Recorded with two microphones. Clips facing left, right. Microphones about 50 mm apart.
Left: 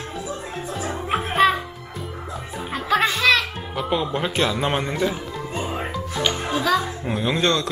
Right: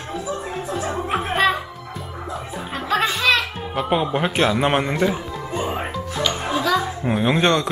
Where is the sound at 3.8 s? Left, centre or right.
Right.